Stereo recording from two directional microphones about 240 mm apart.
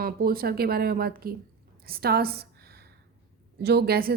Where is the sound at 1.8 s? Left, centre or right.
Right.